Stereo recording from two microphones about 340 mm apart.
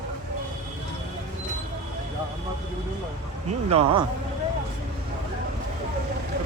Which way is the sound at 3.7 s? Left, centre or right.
Centre.